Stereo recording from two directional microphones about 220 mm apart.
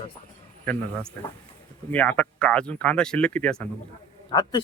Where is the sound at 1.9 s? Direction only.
5° left (ahead or behind).